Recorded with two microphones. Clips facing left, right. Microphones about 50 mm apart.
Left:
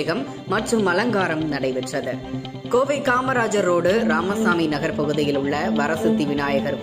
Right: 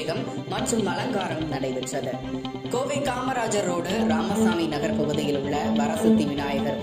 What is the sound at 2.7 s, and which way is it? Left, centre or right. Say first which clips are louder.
A woman's voice: left 8 dB; left.